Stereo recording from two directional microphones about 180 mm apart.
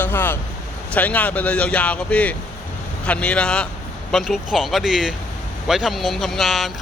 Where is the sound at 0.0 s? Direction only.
10° left (ahead or behind).